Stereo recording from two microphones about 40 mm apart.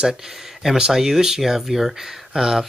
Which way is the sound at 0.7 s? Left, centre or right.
Centre.